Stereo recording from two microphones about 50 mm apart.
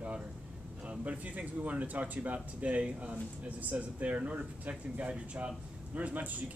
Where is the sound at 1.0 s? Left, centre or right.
Right.